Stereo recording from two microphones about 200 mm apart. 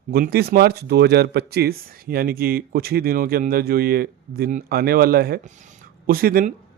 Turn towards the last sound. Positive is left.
turn(degrees=-45)  # may be behind; listen again after turning